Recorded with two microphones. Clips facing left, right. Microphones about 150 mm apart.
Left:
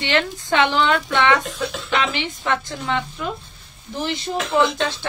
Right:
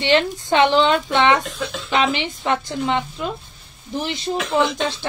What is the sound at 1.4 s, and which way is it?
Speech, centre (ahead or behind).